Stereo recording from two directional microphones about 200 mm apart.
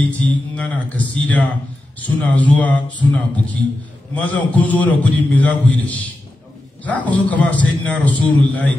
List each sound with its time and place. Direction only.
0.0 s a man's voice: 5° left (ahead or behind)